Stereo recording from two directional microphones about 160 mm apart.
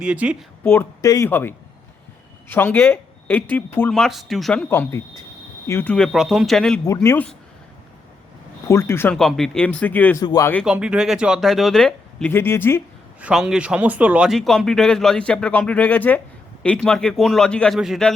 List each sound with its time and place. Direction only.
0.0 s speech: 5° right (ahead or behind)
0.6 s speech: 15° left (ahead or behind)
4.7 s speech: 15° left (ahead or behind)
6.8 s speech: 20° left (ahead or behind)
8.6 s speech: 15° left (ahead or behind)
9.1 s speech: centre (ahead or behind)
10.2 s speech: 20° left (ahead or behind)
10.7 s speech: 5° right (ahead or behind); by 12.8 s 15° left (ahead or behind)
13.2 s speech: 5° right (ahead or behind)